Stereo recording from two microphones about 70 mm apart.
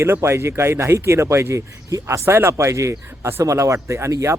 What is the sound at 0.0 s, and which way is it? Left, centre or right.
Speech, right.